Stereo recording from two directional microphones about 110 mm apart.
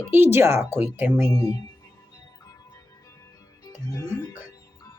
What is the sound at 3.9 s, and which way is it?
Speech, 30° left (ahead or behind).